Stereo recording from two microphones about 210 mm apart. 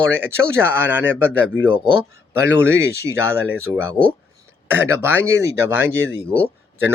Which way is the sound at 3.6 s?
10° right (ahead or behind).